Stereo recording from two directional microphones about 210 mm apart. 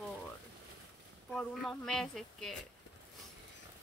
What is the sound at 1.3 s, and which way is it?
Speech, centre (ahead or behind).